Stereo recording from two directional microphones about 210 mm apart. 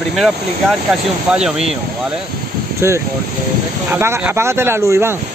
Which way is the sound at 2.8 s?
10° right (ahead or behind).